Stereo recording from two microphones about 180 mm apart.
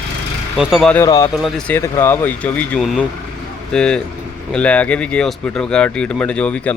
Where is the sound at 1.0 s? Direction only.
20° left (ahead or behind).